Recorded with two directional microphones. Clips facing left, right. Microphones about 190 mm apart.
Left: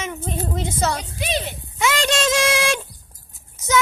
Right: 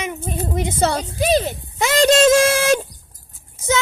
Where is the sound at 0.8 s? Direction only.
35° right (ahead or behind).